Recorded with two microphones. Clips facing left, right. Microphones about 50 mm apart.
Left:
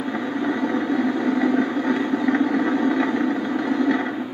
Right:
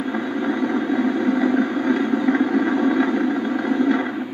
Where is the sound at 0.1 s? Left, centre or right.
Centre.